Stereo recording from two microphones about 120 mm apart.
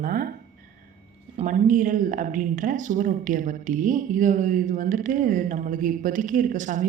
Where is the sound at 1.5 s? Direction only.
90° right.